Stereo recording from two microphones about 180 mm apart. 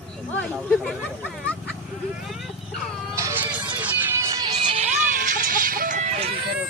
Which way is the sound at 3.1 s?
15° right (ahead or behind).